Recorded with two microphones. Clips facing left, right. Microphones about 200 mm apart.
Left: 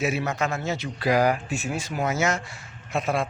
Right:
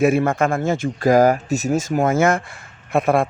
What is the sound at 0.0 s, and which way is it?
A man's voice, 50° right (ahead or behind).